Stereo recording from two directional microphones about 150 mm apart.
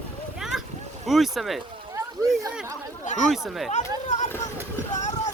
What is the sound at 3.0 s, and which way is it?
Speech, 55° left (ahead or behind).